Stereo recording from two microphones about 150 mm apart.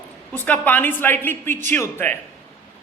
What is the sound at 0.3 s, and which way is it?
A woman's voice, 10° left (ahead or behind).